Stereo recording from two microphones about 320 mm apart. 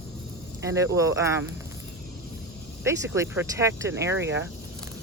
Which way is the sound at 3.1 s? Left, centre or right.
Centre.